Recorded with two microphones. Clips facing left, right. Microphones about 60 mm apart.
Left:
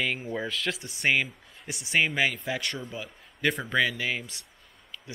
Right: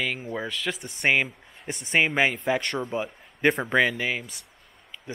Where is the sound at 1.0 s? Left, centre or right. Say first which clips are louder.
Right 3 dB; centre.